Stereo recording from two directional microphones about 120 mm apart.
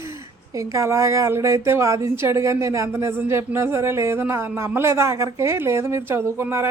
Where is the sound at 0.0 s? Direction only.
25° right (ahead or behind).